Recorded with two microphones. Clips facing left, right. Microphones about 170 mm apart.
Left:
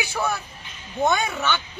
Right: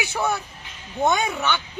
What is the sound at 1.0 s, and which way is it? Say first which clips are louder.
Speech: right 1 dB; 15° right (ahead or behind).